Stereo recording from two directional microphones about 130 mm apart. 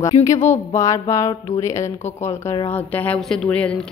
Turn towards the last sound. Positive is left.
turn(degrees=10)  # may be behind; listen again after turning